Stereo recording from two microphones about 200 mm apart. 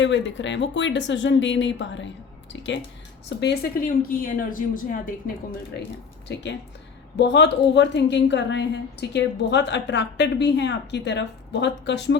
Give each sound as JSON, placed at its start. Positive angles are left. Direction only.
{"t": 0.0, "sound": "a woman's voice", "side_deg": 65}
{"t": 7.2, "sound": "a woman's voice", "side_deg": 60}